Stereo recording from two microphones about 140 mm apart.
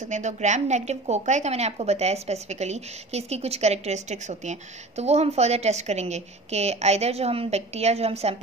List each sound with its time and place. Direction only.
0.0 s a woman's voice: 60° right (ahead or behind)